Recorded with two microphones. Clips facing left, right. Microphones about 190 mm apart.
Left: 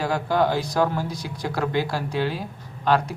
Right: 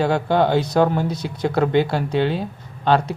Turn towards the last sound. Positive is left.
turn(degrees=-25)  # may be behind; listen again after turning